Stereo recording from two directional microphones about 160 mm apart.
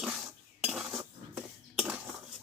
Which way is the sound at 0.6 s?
5° right (ahead or behind).